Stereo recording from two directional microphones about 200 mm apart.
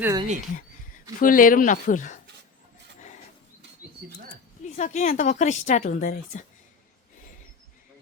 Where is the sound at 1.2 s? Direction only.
45° left (ahead or behind).